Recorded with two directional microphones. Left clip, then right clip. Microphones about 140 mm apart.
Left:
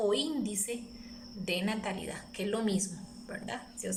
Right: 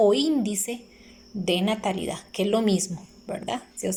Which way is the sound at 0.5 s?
35° right (ahead or behind).